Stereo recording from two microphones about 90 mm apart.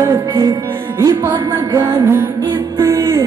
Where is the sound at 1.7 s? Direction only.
30° right (ahead or behind).